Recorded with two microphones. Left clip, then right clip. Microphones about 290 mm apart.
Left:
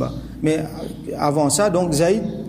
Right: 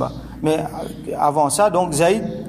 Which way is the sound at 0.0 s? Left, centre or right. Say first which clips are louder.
Right 1 dB; centre.